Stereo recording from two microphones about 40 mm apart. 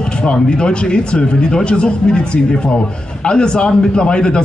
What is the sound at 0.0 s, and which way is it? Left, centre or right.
A man's voice, left.